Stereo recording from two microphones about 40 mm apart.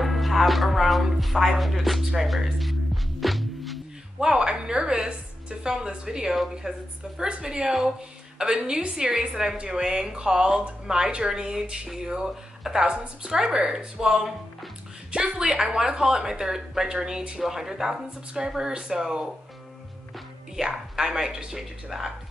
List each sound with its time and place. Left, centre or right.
0.0 s speech: centre
3.2 s music: centre
4.2 s speech: centre
20.5 s speech: centre